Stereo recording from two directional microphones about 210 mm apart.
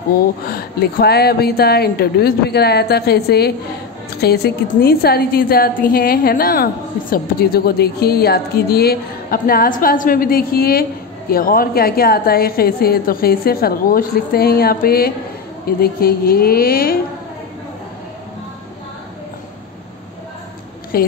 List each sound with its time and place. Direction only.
0.5 s a woman's voice: 45° left (ahead or behind)
20.9 s a woman's voice: 45° left (ahead or behind)